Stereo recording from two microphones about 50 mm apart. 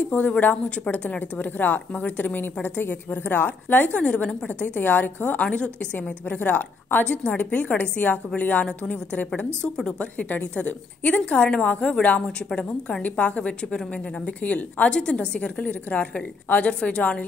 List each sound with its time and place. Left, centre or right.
0.1 s a woman's voice: left
1.4 s a woman's voice: left
4.0 s a woman's voice: left
7.1 s a woman's voice: left